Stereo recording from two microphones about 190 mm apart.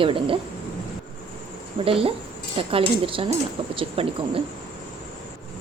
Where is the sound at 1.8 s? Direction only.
30° right (ahead or behind).